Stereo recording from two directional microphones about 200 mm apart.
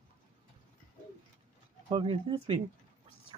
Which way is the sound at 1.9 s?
25° right (ahead or behind).